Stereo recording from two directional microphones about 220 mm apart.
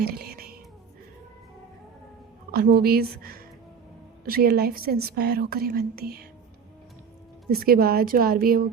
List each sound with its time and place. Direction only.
0.0 s whispering: 45° right (ahead or behind)
2.5 s speech: 45° right (ahead or behind)
7.5 s speech: 45° right (ahead or behind)